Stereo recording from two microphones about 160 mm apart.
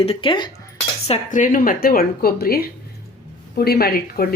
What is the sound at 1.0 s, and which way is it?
A woman's voice, 45° left (ahead or behind).